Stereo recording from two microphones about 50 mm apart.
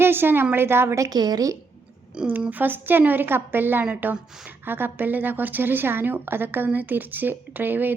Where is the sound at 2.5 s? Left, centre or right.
Right.